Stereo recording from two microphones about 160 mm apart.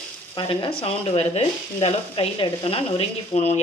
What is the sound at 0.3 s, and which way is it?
Speech, 35° left (ahead or behind).